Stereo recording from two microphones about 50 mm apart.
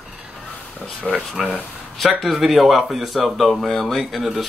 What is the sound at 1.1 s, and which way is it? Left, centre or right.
Speech, centre.